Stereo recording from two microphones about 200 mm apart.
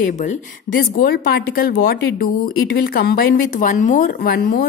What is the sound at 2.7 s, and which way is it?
A woman's voice, 55° left (ahead or behind).